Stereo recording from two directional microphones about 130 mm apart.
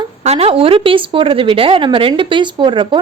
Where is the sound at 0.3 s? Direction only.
50° right (ahead or behind).